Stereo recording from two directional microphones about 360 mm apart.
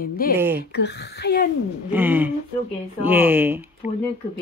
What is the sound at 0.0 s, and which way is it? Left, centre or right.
Speech, left.